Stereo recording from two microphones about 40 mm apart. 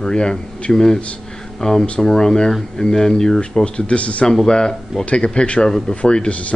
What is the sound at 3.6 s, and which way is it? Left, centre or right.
Speech, left.